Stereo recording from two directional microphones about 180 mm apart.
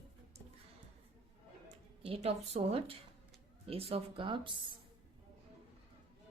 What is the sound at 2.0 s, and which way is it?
Speech, 30° right (ahead or behind).